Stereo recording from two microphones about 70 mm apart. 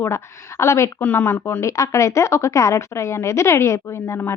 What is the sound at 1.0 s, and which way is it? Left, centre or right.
A woman's voice, left.